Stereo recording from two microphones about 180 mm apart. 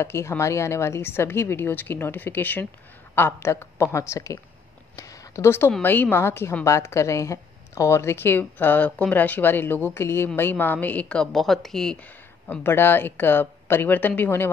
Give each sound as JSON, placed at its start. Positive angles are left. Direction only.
{"t": 0.0, "sound": "a woman's voice", "side_deg": 15}
{"t": 4.9, "sound": "a sound", "side_deg": 20}
{"t": 5.7, "sound": "a woman's voice", "side_deg": 10}